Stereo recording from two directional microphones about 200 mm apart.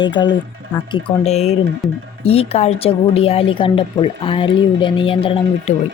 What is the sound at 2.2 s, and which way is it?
A woman's voice, 30° left (ahead or behind).